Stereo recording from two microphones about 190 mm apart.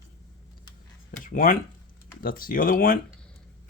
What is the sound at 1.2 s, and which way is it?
Speech, 45° left (ahead or behind).